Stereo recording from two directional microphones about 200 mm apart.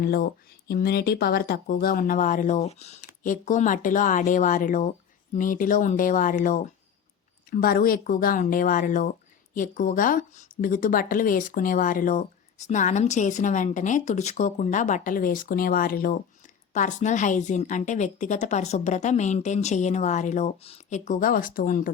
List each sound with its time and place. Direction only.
0.0 s speech: 50° left (ahead or behind)